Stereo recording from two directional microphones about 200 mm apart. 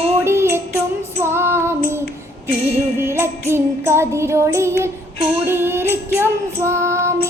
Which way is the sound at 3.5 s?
10° right (ahead or behind).